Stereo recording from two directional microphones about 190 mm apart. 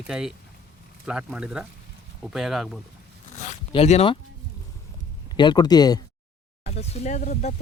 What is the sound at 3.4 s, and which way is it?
Zipper, 35° left (ahead or behind).